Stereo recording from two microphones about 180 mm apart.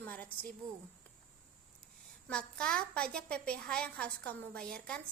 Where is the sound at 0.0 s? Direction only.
10° left (ahead or behind).